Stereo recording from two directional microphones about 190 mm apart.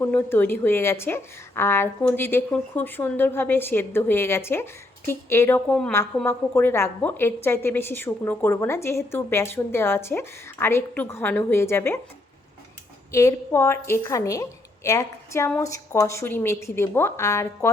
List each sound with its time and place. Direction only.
0.0 s a woman's voice: 10° left (ahead or behind)
13.1 s a woman's voice: 15° left (ahead or behind)